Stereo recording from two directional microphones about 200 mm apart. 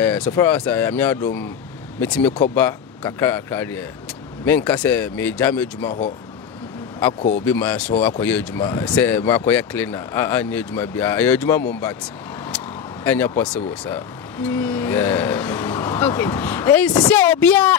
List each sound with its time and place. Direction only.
0.0 s speech: 10° left (ahead or behind)
7.2 s speech: 35° left (ahead or behind)
7.4 s speech: 10° left (ahead or behind)
12.5 s vehicle: 10° left (ahead or behind)
13.7 s speech: 10° left (ahead or behind)